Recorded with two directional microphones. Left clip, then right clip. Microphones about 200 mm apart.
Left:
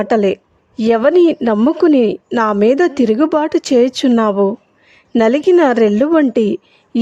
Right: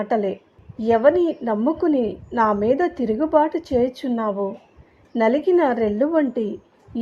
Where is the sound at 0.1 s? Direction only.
75° left (ahead or behind).